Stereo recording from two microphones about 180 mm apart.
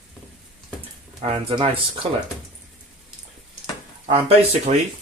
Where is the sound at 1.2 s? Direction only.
30° right (ahead or behind).